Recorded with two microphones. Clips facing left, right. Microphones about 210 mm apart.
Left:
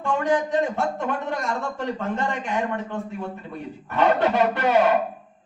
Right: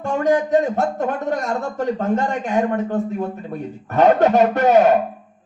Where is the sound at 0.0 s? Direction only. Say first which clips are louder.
Right 4 dB; 45° right (ahead or behind).